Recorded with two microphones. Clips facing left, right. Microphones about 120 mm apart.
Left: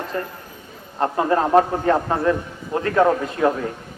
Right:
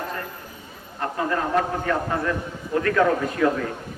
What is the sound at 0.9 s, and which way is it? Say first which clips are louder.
A man's voice: left 6 dB; 30° left (ahead or behind).